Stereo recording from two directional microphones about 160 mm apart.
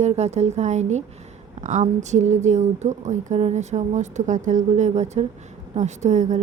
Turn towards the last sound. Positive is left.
turn(degrees=-50)  # may be behind; listen again after turning